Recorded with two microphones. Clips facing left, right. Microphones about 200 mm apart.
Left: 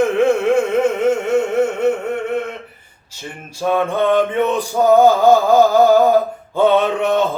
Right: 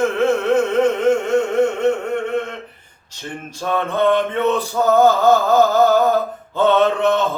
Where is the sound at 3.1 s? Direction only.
10° left (ahead or behind).